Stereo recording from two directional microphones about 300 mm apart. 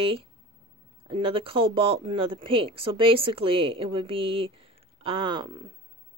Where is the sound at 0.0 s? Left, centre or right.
Centre.